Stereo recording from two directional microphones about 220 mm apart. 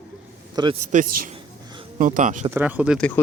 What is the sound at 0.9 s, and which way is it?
Speech, 35° right (ahead or behind).